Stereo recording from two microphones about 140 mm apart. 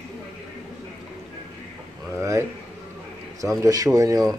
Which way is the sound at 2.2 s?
20° right (ahead or behind).